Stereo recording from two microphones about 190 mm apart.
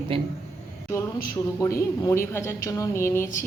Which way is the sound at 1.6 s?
15° left (ahead or behind).